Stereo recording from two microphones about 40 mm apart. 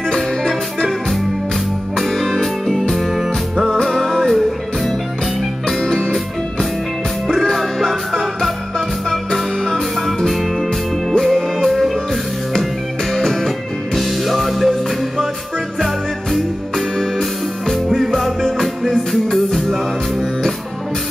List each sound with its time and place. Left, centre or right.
0.5 s music: centre
5.9 s music: centre
7.5 s music: centre
9.3 s music: centre
15.8 s music: centre